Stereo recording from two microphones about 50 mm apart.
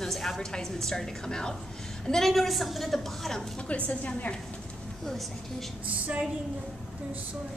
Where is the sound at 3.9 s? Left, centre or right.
Left.